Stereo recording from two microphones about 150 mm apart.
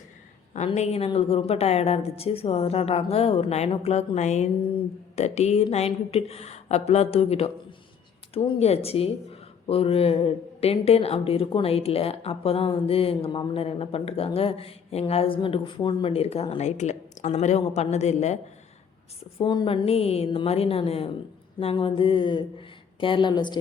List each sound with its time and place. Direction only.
0.5 s a woman's voice: 50° left (ahead or behind)
19.4 s speech: 30° left (ahead or behind)